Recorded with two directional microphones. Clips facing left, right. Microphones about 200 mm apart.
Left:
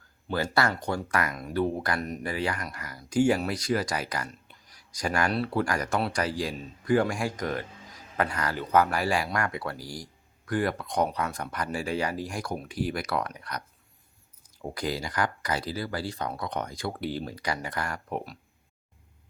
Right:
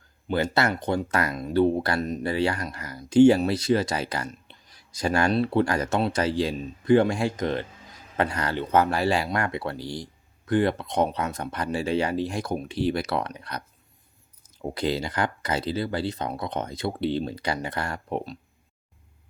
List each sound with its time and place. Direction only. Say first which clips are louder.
0.3 s speech: right 3 dB; 20° right (ahead or behind)